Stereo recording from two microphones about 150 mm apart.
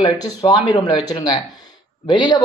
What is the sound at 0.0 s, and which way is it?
Speech, 25° left (ahead or behind).